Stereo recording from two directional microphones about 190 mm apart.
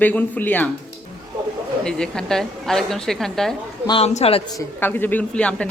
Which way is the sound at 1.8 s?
5° left (ahead or behind).